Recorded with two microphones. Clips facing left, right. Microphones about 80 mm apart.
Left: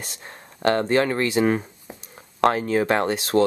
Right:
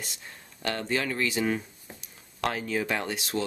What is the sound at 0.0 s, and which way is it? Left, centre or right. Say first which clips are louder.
Speech: left 4 dB; left.